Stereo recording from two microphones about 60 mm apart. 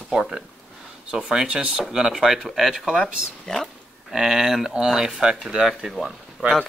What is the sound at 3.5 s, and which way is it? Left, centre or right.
Speech, centre.